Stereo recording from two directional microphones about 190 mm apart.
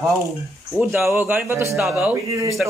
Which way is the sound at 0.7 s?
10° right (ahead or behind).